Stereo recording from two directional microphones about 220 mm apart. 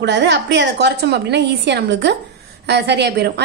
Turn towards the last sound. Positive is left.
turn(degrees=-50)  # may be behind; listen again after turning